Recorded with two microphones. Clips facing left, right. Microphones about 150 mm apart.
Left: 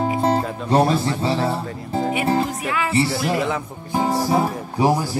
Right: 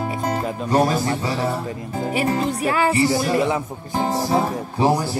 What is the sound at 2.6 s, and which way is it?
Music, 35° right (ahead or behind).